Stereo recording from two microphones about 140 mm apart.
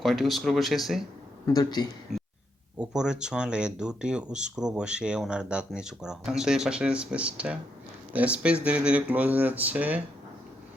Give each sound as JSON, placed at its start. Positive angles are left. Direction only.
{"t": 0.0, "sound": "speech", "side_deg": 0}
{"t": 1.5, "sound": "speech", "side_deg": 30}
{"t": 2.1, "sound": "a sound", "side_deg": 0}
{"t": 2.7, "sound": "speech", "side_deg": -5}